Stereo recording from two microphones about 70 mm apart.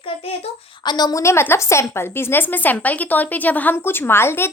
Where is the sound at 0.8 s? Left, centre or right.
Left.